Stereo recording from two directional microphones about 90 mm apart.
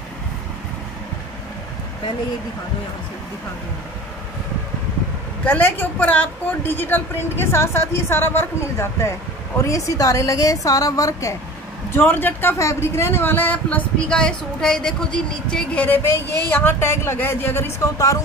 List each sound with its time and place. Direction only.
5.4 s a woman's voice: 20° left (ahead or behind); by 11.3 s 35° left (ahead or behind)
11.9 s speech: 20° left (ahead or behind); by 18.2 s 40° left (ahead or behind)